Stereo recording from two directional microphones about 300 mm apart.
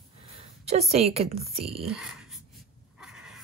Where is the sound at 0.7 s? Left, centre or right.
Right.